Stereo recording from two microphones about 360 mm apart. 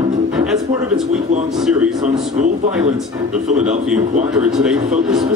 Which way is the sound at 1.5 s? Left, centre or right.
Centre.